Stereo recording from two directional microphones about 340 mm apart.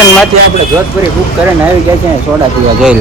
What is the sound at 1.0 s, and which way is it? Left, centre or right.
Speech, centre.